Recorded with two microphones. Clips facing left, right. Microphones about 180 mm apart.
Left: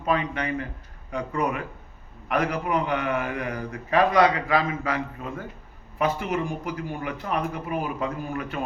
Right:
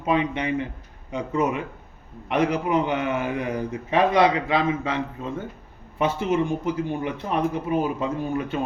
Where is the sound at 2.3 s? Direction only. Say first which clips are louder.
Right 3 dB; 25° right (ahead or behind).